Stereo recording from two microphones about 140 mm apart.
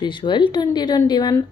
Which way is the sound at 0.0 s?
35° left (ahead or behind).